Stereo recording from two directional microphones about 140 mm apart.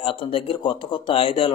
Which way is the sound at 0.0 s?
40° left (ahead or behind).